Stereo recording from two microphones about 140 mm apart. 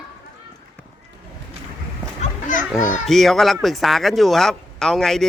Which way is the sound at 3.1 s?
Centre (ahead or behind).